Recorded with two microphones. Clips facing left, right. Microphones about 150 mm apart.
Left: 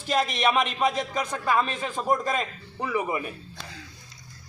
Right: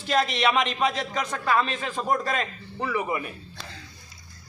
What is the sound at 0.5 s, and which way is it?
A man's voice, 10° left (ahead or behind).